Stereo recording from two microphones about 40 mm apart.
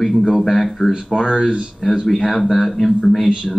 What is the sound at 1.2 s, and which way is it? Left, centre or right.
Speech, centre.